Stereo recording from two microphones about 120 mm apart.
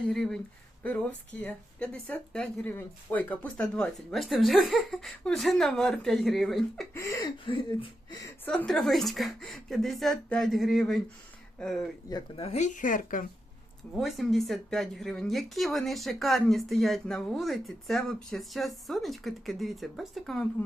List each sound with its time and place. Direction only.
0.1 s speech: 5° left (ahead or behind)
1.4 s speech: 10° left (ahead or behind)
6.9 s a sound: 25° left (ahead or behind)
7.4 s speech: 45° left (ahead or behind)
8.4 s speech: 5° left (ahead or behind)
12.4 s speech: 65° left (ahead or behind); by 13.2 s 90° left
13.9 s speech: centre (ahead or behind)